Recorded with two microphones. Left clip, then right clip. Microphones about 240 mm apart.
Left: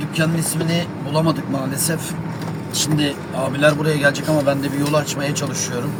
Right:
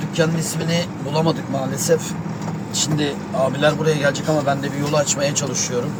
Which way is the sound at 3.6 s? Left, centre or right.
Left.